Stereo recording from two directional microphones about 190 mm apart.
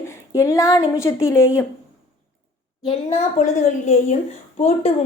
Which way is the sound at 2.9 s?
35° left (ahead or behind).